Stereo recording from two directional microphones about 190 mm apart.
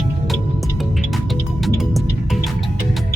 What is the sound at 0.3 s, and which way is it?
Music, centre (ahead or behind).